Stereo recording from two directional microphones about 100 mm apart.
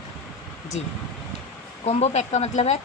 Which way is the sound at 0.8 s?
90° left.